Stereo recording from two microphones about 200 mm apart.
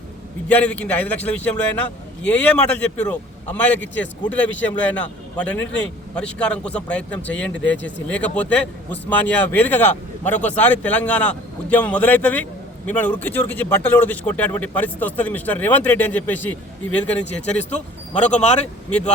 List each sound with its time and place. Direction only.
0.4 s a man's voice: 5° left (ahead or behind)
7.2 s speech: 65° left (ahead or behind)
8.0 s a man's voice: 5° left (ahead or behind)
17.5 s speech: 35° left (ahead or behind)
17.7 s speech: 5° left (ahead or behind)
18.3 s speech: 35° left (ahead or behind)